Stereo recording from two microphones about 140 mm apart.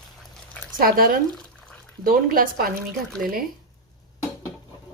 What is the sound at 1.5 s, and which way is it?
Bathtub, 5° left (ahead or behind).